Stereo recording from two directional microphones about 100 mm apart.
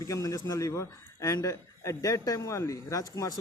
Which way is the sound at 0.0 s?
35° left (ahead or behind).